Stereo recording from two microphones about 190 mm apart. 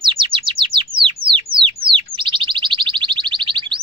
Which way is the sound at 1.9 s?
25° right (ahead or behind).